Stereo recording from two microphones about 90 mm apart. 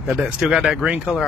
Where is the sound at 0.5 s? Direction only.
10° right (ahead or behind).